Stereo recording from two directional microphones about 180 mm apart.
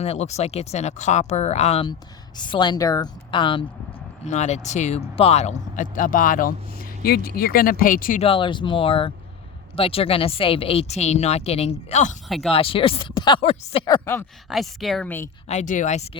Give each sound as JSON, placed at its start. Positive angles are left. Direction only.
{"t": 0.0, "sound": "a woman's voice", "side_deg": 35}
{"t": 4.3, "sound": "speech", "side_deg": 40}
{"t": 8.2, "sound": "a woman's voice", "side_deg": 30}
{"t": 13.4, "sound": "speech", "side_deg": 35}
{"t": 13.8, "sound": "speech", "side_deg": 15}
{"t": 14.5, "sound": "speech", "side_deg": 0}
{"t": 15.4, "sound": "speech", "side_deg": 40}